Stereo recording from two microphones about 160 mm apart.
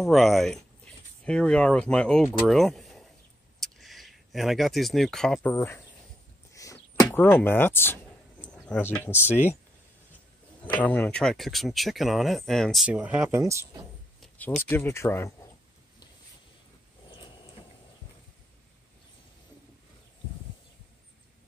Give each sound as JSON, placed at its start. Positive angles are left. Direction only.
{"t": 0.0, "sound": "speech", "side_deg": 0}
{"t": 5.5, "sound": "speech", "side_deg": 15}
{"t": 6.5, "sound": "a sound", "side_deg": 20}
{"t": 8.5, "sound": "speech", "side_deg": 5}
{"t": 10.6, "sound": "speech", "side_deg": 10}
{"t": 14.7, "sound": "speech", "side_deg": 15}
{"t": 17.1, "sound": "a sound", "side_deg": 30}